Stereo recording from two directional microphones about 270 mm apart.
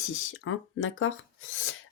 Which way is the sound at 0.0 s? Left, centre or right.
Left.